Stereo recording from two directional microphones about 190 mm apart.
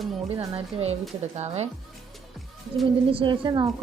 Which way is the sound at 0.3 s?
30° right (ahead or behind).